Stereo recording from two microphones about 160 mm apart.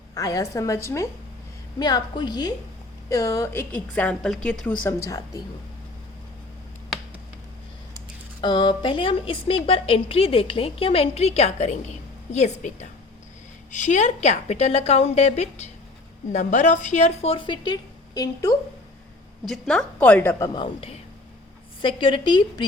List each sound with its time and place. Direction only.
0.1 s a woman's voice: 20° left (ahead or behind)
8.4 s a woman's voice: 30° left (ahead or behind)
19.5 s a woman's voice: 5° left (ahead or behind)
20.5 s a woman's voice: 30° left (ahead or behind)